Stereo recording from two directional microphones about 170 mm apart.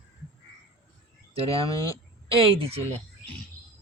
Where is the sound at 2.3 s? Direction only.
30° right (ahead or behind).